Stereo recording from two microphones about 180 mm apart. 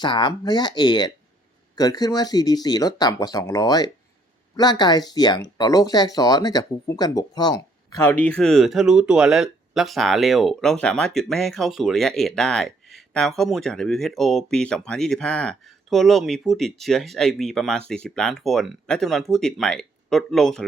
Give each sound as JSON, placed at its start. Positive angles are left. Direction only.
{"t": 0.0, "sound": "speech", "side_deg": 25}